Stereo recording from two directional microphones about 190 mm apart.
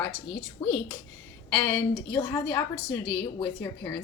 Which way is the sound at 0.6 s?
25° left (ahead or behind).